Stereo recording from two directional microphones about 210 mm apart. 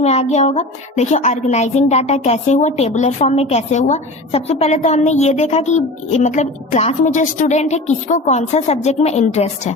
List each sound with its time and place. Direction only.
0.0 s a woman's voice: 30° left (ahead or behind)